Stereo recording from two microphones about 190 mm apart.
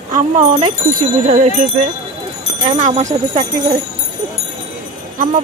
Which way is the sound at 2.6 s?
40° right (ahead or behind).